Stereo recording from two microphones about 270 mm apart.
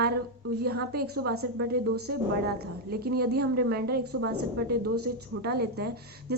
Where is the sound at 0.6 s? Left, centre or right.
Right.